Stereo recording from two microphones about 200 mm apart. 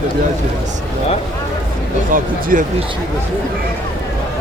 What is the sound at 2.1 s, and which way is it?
Speech, 45° right (ahead or behind).